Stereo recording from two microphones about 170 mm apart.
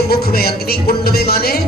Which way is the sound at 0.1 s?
65° left (ahead or behind).